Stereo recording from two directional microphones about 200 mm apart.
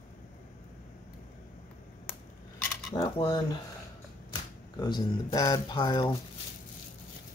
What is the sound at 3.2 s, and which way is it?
Speech, 20° left (ahead or behind).